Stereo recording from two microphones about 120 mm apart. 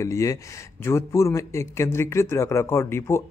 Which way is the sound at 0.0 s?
25° left (ahead or behind).